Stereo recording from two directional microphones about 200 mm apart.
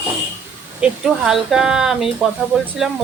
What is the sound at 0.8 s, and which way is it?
A woman's voice, 5° right (ahead or behind).